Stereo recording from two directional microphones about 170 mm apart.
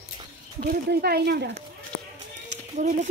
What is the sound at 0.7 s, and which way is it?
Speech, 65° right (ahead or behind).